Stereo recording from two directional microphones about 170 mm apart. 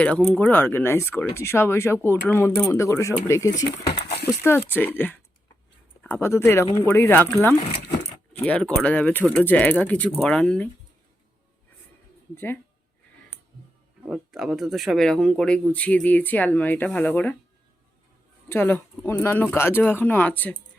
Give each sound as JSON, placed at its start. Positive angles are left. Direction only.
{"t": 0.0, "sound": "speech", "side_deg": 5}
{"t": 8.3, "sound": "speech", "side_deg": 10}
{"t": 14.1, "sound": "speech", "side_deg": 0}
{"t": 18.4, "sound": "speech", "side_deg": 10}